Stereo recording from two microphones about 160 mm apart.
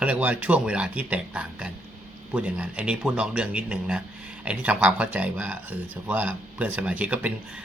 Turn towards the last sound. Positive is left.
turn(degrees=-10)  # may be behind; listen again after turning